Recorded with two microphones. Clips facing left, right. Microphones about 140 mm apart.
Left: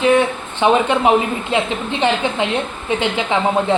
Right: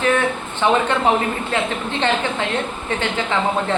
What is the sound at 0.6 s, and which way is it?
A man's voice, 15° left (ahead or behind).